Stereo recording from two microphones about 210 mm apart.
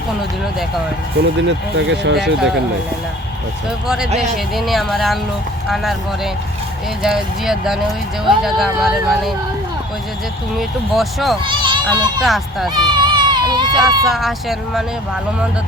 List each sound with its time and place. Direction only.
1.4 s speech: 60° right (ahead or behind)
3.8 s speech: 5° right (ahead or behind)
10.6 s speech: centre (ahead or behind)
11.4 s a child's voice: 20° right (ahead or behind)
12.2 s speech: centre (ahead or behind)
12.7 s a sound: 20° right (ahead or behind)
13.7 s speech: centre (ahead or behind)